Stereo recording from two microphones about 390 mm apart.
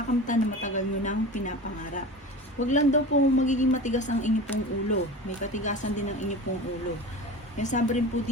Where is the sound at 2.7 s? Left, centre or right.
Centre.